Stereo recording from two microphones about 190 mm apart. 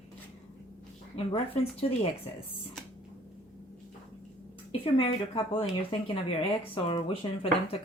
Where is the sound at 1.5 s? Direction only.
30° left (ahead or behind).